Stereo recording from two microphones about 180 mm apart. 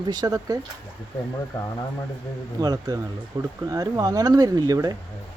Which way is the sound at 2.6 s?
20° right (ahead or behind).